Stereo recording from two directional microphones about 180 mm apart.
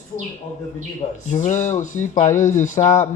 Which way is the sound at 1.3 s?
40° left (ahead or behind).